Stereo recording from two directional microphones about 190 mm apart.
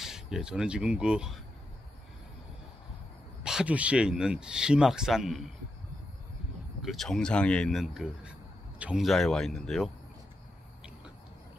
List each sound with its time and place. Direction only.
0.0 s speech: centre (ahead or behind)
3.4 s speech: 5° right (ahead or behind)
6.8 s a man's voice: centre (ahead or behind)